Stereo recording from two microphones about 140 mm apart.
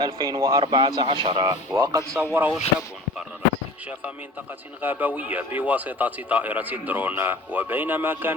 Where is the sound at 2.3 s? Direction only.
10° right (ahead or behind).